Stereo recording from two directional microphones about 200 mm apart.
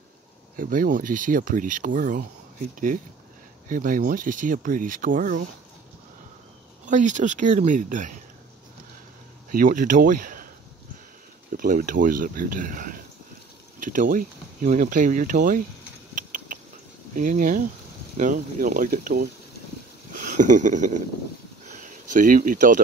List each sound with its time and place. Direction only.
0.6 s speech: 45° right (ahead or behind)
3.6 s speech: 45° right (ahead or behind)
6.9 s speech: 40° right (ahead or behind)
9.5 s speech: 45° right (ahead or behind)
11.5 s speech: 45° right (ahead or behind)
17.1 s speech: 45° right (ahead or behind)
20.1 s a sound: 40° right (ahead or behind)